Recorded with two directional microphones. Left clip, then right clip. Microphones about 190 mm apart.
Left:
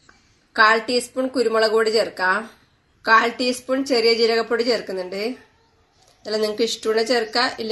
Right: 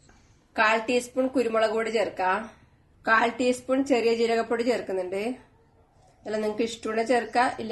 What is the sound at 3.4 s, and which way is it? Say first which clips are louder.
A woman's voice: left 2 dB; 20° left (ahead or behind).